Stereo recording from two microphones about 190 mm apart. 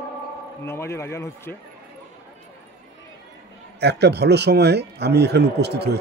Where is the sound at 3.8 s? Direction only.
60° right (ahead or behind).